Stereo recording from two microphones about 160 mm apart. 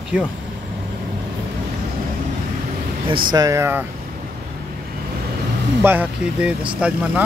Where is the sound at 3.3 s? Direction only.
20° right (ahead or behind).